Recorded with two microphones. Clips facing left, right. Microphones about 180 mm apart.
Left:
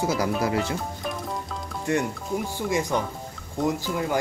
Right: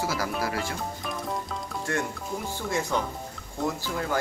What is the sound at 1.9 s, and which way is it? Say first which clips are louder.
Speech: left 5 dB; 20° left (ahead or behind).